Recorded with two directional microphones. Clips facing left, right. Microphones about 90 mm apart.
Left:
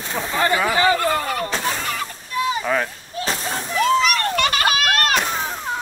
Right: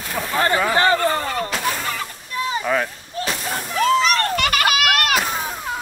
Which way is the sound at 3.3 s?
30° left (ahead or behind).